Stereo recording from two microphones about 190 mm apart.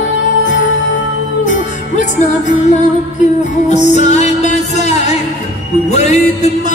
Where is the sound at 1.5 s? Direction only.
40° left (ahead or behind).